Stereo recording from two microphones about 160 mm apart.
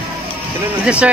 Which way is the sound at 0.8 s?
5° right (ahead or behind).